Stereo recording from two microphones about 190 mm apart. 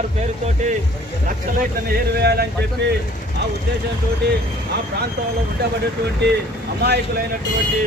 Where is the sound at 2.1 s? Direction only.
60° right (ahead or behind).